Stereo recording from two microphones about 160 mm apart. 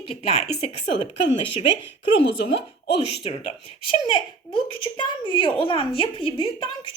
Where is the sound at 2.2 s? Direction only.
90° left.